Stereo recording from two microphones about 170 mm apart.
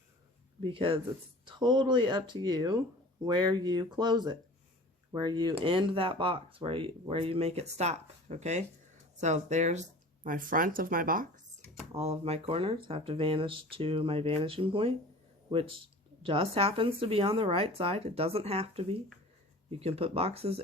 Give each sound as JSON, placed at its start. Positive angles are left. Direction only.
{"t": 0.6, "sound": "speech", "side_deg": -30}
{"t": 11.9, "sound": "speech", "side_deg": -40}